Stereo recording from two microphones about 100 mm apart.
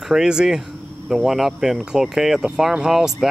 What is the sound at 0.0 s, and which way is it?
Speech, 5° right (ahead or behind).